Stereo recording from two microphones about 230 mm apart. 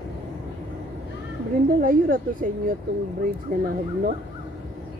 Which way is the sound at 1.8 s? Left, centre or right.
Right.